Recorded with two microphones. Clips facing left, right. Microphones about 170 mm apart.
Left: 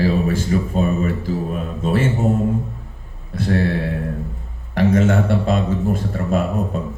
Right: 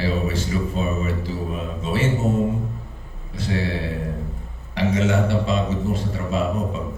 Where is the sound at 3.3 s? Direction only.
55° left (ahead or behind).